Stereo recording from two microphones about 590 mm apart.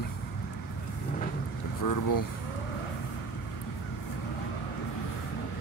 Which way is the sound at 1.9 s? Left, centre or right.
Left.